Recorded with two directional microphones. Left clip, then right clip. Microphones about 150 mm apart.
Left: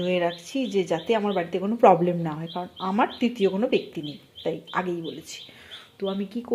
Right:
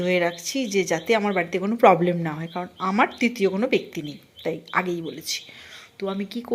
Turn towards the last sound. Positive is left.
turn(degrees=-5)  # may be behind; listen again after turning